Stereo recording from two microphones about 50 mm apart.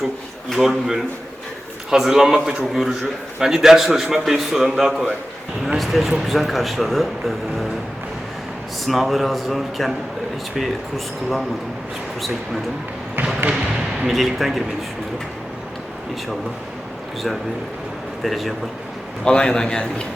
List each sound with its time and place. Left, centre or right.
0.5 s a man's voice: centre
8.9 s a man's voice: centre
13.5 s basketball bounce: centre
14.1 s a man's voice: centre
18.2 s a man's voice: centre
19.2 s a man's voice: centre